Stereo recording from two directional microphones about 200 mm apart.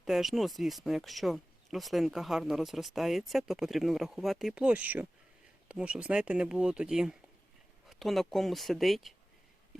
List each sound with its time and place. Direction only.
0.0 s speech: centre (ahead or behind)